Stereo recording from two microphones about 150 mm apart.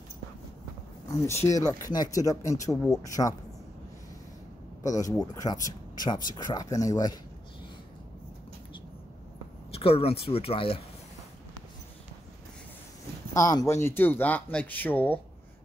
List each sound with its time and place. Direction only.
1.2 s speech: 20° left (ahead or behind)
4.8 s speech: 25° left (ahead or behind)
9.7 s a sound: 40° left (ahead or behind)
10.2 s speech: 40° left (ahead or behind)
13.3 s speech: 25° left (ahead or behind)